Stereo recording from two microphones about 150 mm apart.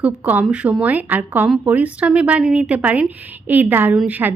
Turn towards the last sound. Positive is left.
turn(degrees=-10)  # may be behind; listen again after turning